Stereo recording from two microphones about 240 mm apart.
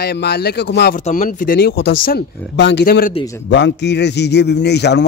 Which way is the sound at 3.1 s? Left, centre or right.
Centre.